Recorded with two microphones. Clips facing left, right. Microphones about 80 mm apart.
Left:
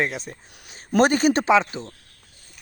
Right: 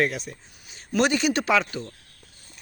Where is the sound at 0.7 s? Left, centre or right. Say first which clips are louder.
Left 4 dB; left.